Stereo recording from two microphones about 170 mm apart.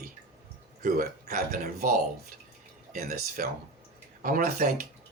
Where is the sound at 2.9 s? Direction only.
60° right (ahead or behind).